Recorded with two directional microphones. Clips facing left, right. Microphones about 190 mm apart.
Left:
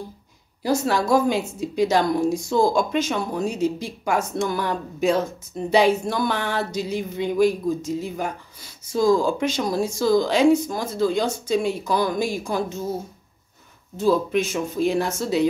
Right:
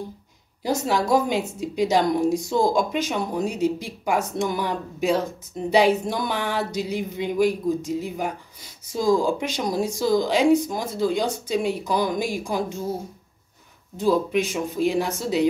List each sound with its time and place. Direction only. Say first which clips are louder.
0.7 s speech: left 1 dB; 20° right (ahead or behind)
13.9 s speech: left 1 dB; 15° right (ahead or behind)